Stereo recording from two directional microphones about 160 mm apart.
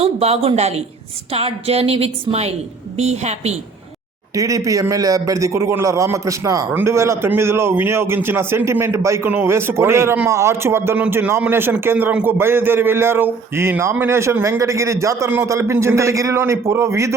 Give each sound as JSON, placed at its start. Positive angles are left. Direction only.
{"t": 0.0, "sound": "a woman's voice", "side_deg": -40}
{"t": 4.4, "sound": "a man's voice", "side_deg": -20}